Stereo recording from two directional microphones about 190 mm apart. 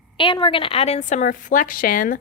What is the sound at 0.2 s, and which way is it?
A woman's voice, 25° left (ahead or behind).